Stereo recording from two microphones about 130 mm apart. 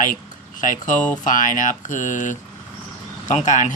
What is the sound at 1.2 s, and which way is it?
Speech, 85° left.